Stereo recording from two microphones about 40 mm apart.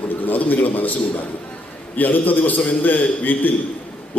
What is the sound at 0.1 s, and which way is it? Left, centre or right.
A man's voice, left.